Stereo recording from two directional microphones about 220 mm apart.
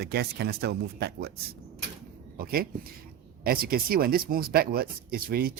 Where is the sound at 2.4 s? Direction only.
40° right (ahead or behind).